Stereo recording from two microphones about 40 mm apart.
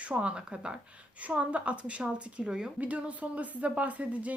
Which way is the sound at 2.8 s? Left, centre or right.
Right.